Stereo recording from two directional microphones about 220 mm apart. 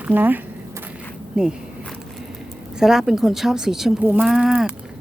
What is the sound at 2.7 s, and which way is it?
Speech, centre (ahead or behind).